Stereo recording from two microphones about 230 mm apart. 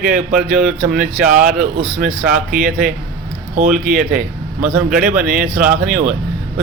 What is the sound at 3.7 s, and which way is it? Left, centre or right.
Speech, right.